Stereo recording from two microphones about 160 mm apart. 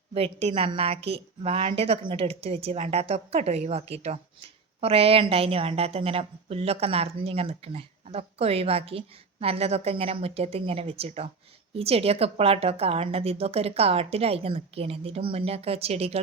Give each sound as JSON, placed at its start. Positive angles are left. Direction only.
{"t": 0.1, "sound": "a woman's voice", "side_deg": -40}